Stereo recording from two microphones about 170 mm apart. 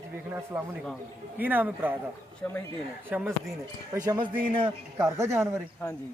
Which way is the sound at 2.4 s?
10° left (ahead or behind).